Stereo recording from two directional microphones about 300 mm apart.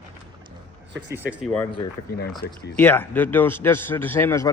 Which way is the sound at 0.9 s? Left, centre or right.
Right.